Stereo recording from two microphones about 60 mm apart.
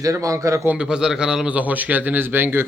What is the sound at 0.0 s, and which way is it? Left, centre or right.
Speech, right.